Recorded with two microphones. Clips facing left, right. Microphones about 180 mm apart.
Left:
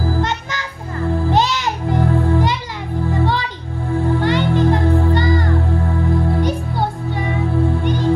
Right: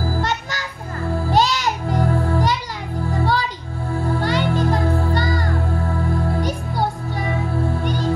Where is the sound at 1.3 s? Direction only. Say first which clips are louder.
Right 3 dB; 20° left (ahead or behind).